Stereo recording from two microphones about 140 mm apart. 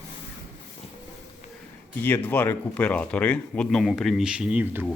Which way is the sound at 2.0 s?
15° left (ahead or behind).